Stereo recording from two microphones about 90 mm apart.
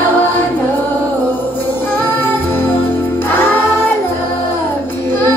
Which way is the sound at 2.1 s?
20° left (ahead or behind).